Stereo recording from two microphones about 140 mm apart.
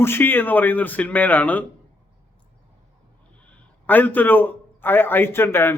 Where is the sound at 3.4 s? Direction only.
10° left (ahead or behind).